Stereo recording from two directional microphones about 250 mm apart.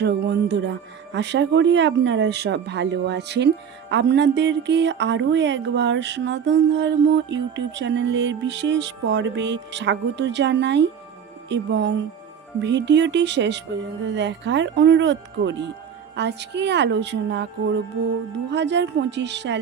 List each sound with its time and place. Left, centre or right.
0.0 s speech: right